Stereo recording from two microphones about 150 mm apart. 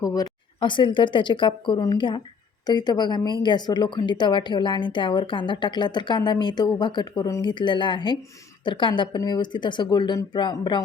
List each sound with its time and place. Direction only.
0.0 s a woman's voice: 25° left (ahead or behind)